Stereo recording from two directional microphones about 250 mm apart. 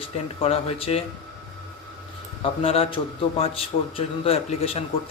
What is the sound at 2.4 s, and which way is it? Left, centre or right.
Speech, left.